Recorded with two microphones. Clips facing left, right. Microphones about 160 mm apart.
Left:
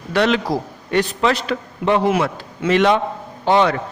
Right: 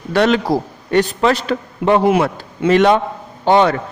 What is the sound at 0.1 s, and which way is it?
A man's voice, 45° right (ahead or behind).